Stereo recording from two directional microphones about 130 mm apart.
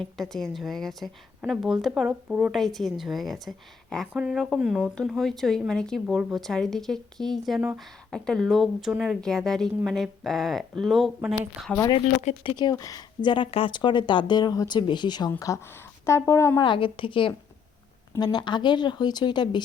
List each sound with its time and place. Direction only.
0.0 s a woman's voice: 5° left (ahead or behind)
12.5 s speech: 30° left (ahead or behind)
16.6 s speech: 40° left (ahead or behind)